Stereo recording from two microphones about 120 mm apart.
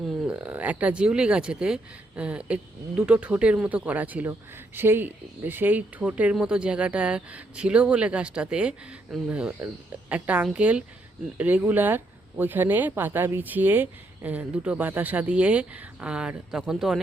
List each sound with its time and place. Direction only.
0.3 s speech: 10° right (ahead or behind)